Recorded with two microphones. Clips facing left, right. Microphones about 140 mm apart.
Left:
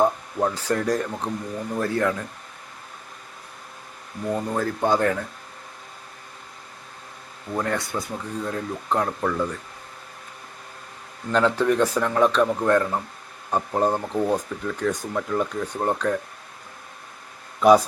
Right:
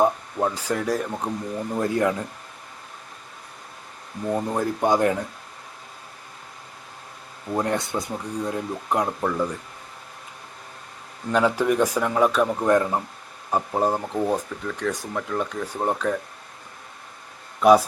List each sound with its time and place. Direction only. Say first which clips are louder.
0.0 s speech: even; 10° right (ahead or behind)
4.3 s speech: right 1 dB; 15° right (ahead or behind)
7.5 s speech: right 2 dB; 20° right (ahead or behind)
11.3 s speech: even; 10° right (ahead or behind)
13.5 s speech: even; 5° right (ahead or behind)
17.6 s speech: even; centre (ahead or behind)